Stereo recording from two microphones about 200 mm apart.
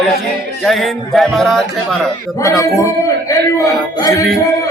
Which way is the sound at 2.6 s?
15° left (ahead or behind).